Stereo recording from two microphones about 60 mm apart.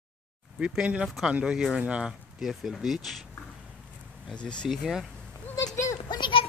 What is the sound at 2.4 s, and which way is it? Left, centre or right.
Speech, centre.